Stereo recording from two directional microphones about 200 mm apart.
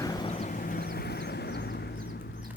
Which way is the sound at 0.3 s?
35° left (ahead or behind).